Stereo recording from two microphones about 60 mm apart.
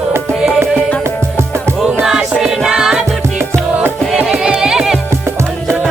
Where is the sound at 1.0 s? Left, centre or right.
Right.